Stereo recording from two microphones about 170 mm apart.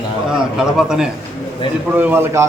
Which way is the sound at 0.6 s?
5° right (ahead or behind).